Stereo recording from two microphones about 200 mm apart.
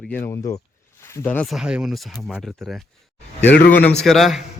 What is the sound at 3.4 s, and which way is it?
Speech, 60° left (ahead or behind).